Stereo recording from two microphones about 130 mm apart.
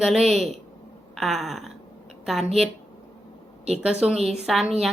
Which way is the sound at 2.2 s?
5° right (ahead or behind).